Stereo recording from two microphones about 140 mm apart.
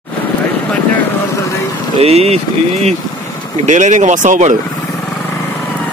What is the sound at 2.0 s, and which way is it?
Speech, 50° right (ahead or behind).